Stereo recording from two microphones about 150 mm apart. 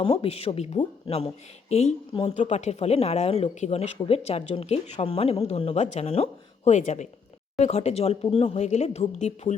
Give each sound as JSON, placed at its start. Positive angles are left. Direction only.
{"t": 0.0, "sound": "speech", "side_deg": 40}